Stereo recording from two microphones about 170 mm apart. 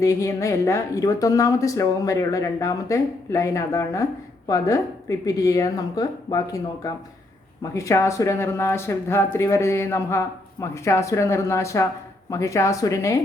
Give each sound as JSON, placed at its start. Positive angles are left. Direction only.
{"t": 0.0, "sound": "speech", "side_deg": 20}